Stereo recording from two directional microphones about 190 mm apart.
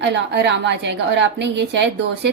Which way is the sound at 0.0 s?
65° right (ahead or behind).